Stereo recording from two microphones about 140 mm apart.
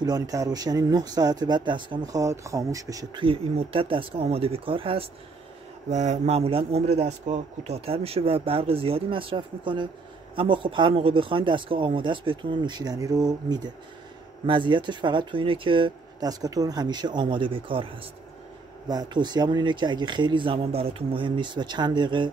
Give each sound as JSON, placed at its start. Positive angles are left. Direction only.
{"t": 0.0, "sound": "speech", "side_deg": -25}
{"t": 2.2, "sound": "speech", "side_deg": -20}
{"t": 3.2, "sound": "speech", "side_deg": -40}
{"t": 5.9, "sound": "speech", "side_deg": -55}